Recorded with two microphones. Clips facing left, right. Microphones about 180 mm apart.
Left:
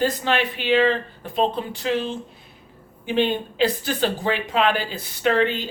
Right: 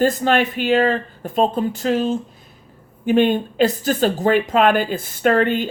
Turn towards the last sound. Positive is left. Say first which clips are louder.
# right 4 dB
turn(degrees=-50)  # may be behind; listen again after turning